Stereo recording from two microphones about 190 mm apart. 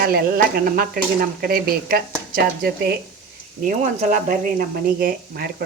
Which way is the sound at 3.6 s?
40° right (ahead or behind).